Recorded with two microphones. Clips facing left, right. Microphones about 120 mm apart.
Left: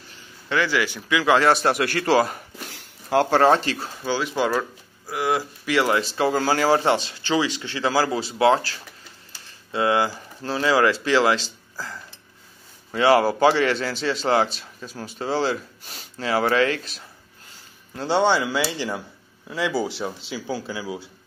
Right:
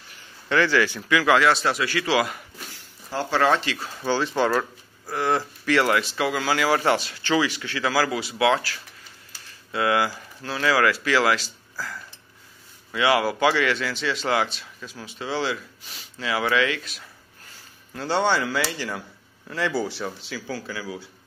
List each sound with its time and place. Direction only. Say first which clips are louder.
0.5 s speech: right 2 dB; 15° left (ahead or behind)
1.4 s a man's voice: left 2 dB; 50° left (ahead or behind)
2.7 s a sound: left 11 dB; 70° left (ahead or behind)
3.3 s speech: left 1 dB; 40° left (ahead or behind)
4.0 s speech: right 1 dB; 5° left (ahead or behind)
5.9 s speech: left 3 dB; 30° left (ahead or behind)
6.8 s speech: left 1 dB; 25° left (ahead or behind)
12.9 s speech: left 4 dB; 35° left (ahead or behind)
17.9 s speech: left 3 dB; 20° left (ahead or behind)